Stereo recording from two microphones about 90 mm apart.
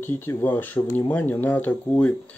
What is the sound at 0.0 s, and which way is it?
Speech, 25° left (ahead or behind).